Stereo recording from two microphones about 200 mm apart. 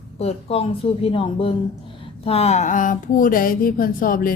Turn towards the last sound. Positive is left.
turn(degrees=45)  # may be behind; listen again after turning